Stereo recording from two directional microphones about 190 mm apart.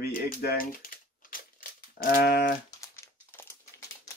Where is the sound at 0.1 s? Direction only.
50° left (ahead or behind).